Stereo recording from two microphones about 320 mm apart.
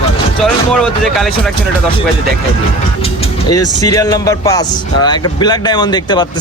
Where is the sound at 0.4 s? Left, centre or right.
Centre.